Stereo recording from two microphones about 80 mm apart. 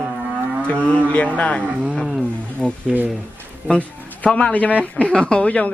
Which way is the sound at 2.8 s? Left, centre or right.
Right.